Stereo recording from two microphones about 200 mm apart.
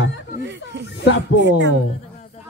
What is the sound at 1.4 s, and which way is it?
Speech, 65° right (ahead or behind).